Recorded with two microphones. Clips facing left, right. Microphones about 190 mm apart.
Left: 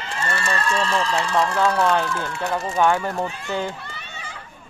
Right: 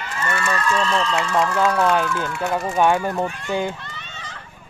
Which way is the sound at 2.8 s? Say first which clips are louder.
Right 1 dB; 15° right (ahead or behind).